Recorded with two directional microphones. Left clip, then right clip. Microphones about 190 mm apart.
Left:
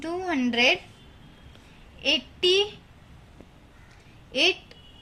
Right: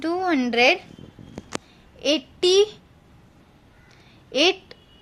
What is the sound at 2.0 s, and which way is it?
Speech, 65° right (ahead or behind).